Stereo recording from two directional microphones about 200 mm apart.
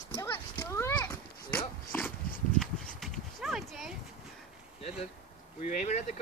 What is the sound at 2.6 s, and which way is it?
Horse, centre (ahead or behind).